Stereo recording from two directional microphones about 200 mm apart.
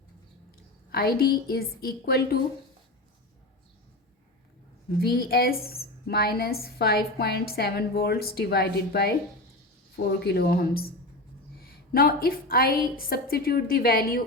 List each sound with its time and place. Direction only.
0.9 s a woman's voice: 50° left (ahead or behind)
5.0 s a woman's voice: 50° left (ahead or behind)
10.2 s a woman's voice: 55° left (ahead or behind)